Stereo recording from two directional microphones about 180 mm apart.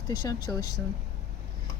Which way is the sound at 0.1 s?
20° left (ahead or behind).